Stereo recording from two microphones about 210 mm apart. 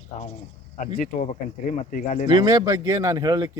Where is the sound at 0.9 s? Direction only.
35° left (ahead or behind).